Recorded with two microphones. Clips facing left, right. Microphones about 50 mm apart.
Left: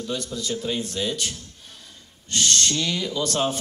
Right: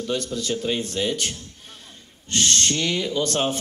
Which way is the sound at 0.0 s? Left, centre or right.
Right.